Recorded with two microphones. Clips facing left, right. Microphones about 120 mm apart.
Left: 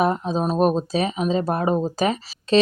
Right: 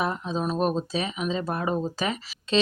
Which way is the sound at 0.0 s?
40° left (ahead or behind).